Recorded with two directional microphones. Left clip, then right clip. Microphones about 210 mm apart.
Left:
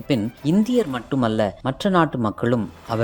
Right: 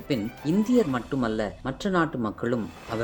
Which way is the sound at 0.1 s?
35° left (ahead or behind).